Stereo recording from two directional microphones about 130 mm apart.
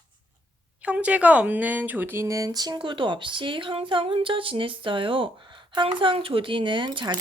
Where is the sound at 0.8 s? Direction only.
10° right (ahead or behind).